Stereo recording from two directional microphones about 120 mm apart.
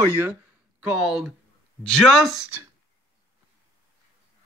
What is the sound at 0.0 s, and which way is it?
Speech, 15° right (ahead or behind).